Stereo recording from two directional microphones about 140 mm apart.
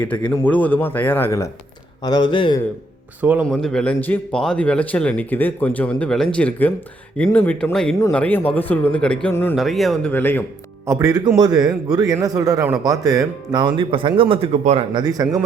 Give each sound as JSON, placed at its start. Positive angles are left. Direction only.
{"t": 0.0, "sound": "speech", "side_deg": 15}
{"t": 2.0, "sound": "speech", "side_deg": 30}
{"t": 3.2, "sound": "speech", "side_deg": -10}
{"t": 3.4, "sound": "speech", "side_deg": 5}
{"t": 9.6, "sound": "speech", "side_deg": 0}
{"t": 10.1, "sound": "speech", "side_deg": 15}
{"t": 10.8, "sound": "a man's voice", "side_deg": -20}
{"t": 14.5, "sound": "speech", "side_deg": -55}
{"t": 14.9, "sound": "a man's voice", "side_deg": -25}